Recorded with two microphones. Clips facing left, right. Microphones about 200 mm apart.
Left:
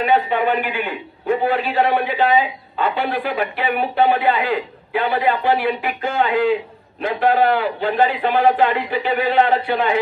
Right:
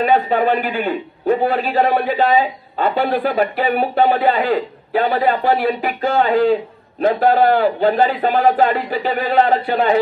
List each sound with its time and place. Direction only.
0.0 s a man's voice: 40° right (ahead or behind)